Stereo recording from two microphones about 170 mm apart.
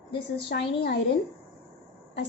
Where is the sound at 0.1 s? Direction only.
80° left.